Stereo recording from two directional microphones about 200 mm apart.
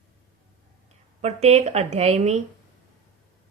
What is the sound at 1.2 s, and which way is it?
Speech, 35° right (ahead or behind).